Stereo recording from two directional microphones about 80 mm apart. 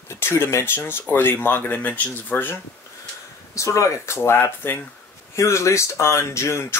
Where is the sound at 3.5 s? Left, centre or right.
Left.